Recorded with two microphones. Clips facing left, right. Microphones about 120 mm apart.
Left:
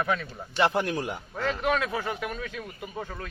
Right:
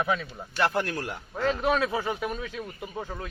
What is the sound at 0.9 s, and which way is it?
Speech, 15° left (ahead or behind).